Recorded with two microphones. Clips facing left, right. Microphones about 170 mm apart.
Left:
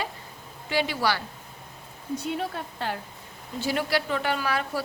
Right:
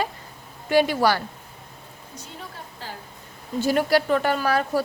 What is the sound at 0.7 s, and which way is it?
Speech, 50° right (ahead or behind).